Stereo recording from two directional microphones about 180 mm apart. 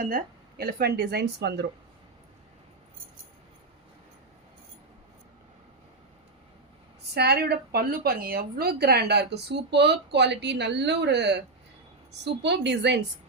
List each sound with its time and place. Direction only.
0.6 s speech: 60° right (ahead or behind)
7.1 s speech: 65° right (ahead or behind)